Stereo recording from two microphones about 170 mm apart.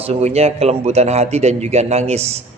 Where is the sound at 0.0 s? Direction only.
40° right (ahead or behind).